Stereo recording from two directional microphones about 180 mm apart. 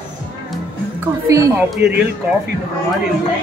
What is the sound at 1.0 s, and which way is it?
Speech, 15° right (ahead or behind).